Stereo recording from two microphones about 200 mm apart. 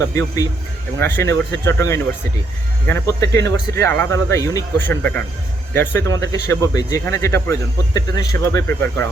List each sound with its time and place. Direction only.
0.0 s speech: 15° left (ahead or behind)